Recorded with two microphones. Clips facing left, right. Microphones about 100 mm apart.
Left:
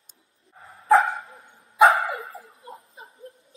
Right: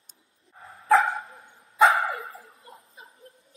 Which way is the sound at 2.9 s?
30° left (ahead or behind).